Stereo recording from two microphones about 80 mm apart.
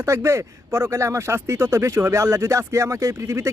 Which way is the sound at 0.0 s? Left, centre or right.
Right.